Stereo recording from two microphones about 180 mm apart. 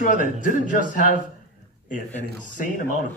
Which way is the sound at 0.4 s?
45° left (ahead or behind).